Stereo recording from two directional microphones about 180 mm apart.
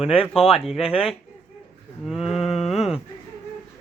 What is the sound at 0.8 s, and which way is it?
Speech, 30° left (ahead or behind).